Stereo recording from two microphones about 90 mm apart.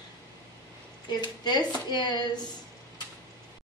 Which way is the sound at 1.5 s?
55° left (ahead or behind).